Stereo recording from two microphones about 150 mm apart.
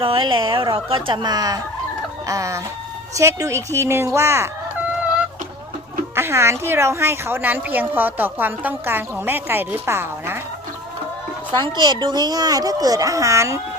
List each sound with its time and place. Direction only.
0.0 s a woman's voice: 35° right (ahead or behind); by 4.4 s 15° right (ahead or behind)
6.1 s a woman's voice: 15° right (ahead or behind)
11.5 s speech: 30° right (ahead or behind)